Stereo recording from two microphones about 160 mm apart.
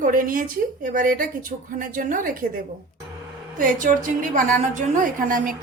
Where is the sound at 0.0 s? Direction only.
60° right (ahead or behind).